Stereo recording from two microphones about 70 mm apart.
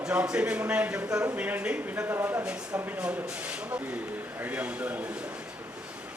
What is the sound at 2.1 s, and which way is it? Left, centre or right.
Speech, right.